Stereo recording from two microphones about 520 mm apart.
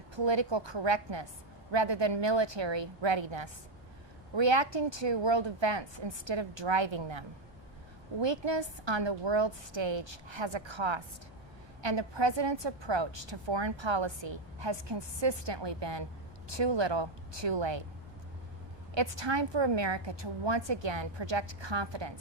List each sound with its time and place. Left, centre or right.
0.2 s a woman's voice: right
18.9 s a woman's voice: right